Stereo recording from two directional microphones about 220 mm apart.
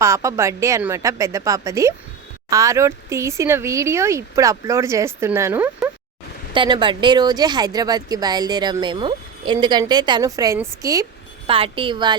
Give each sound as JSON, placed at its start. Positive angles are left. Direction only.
{"t": 0.0, "sound": "speech", "side_deg": -15}
{"t": 6.5, "sound": "speech", "side_deg": -20}
{"t": 11.4, "sound": "speech", "side_deg": -25}